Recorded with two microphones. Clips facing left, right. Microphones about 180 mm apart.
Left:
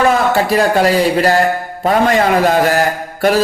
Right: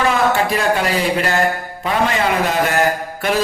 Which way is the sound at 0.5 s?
35° left (ahead or behind).